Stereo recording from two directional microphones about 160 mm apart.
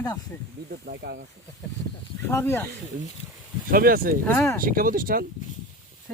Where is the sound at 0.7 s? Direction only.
90° right.